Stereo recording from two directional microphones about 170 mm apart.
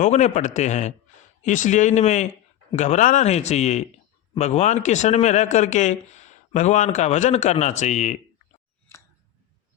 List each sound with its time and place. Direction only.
0.0 s speech: 45° left (ahead or behind)